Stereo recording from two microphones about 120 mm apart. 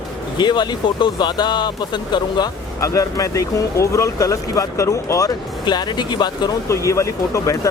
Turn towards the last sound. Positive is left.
turn(degrees=25)  # may be behind; listen again after turning